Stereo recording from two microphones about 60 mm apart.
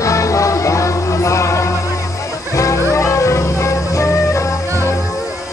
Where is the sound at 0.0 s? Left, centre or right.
Left.